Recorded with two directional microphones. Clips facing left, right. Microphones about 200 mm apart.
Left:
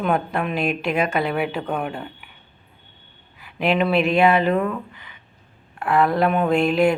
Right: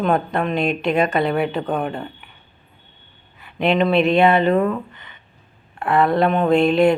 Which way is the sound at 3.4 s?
5° left (ahead or behind).